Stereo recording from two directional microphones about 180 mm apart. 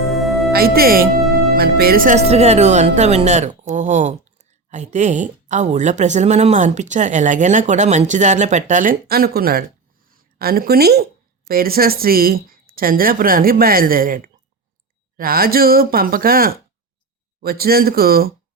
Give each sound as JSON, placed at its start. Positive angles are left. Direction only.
{"t": 0.1, "sound": "music", "side_deg": 0}
{"t": 0.5, "sound": "speech", "side_deg": -60}
{"t": 2.1, "sound": "a woman's voice", "side_deg": -35}